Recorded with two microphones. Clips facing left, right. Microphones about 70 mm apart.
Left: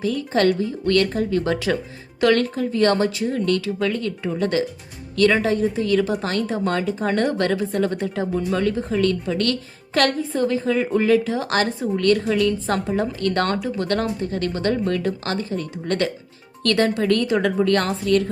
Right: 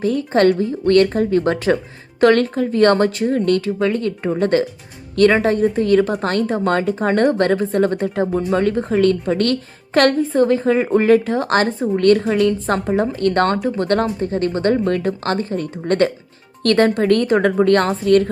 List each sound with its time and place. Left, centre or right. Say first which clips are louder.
0.0 s a woman's voice: right 4 dB; right